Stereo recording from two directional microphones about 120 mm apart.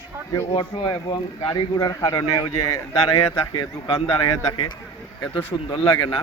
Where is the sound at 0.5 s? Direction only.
35° left (ahead or behind).